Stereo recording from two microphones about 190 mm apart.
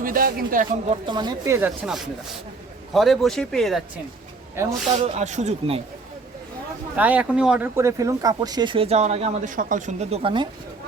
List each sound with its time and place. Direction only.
0.0 s speech: 50° right (ahead or behind)
1.0 s speech: 25° right (ahead or behind)
1.5 s speech: 5° right (ahead or behind)
4.6 s speech: 15° right (ahead or behind)
5.0 s speech: 35° right (ahead or behind)
6.9 s speech: 10° right (ahead or behind); by 10.5 s 25° right (ahead or behind)